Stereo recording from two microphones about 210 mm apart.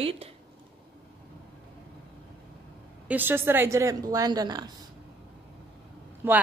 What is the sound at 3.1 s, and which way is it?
A woman's voice, 10° right (ahead or behind).